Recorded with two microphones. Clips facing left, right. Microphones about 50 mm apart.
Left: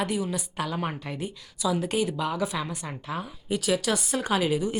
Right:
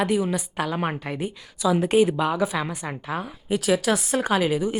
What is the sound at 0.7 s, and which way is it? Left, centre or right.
Speech, right.